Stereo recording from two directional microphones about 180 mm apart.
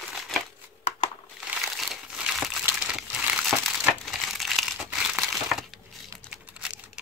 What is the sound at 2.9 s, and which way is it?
Crumpling, 5° right (ahead or behind).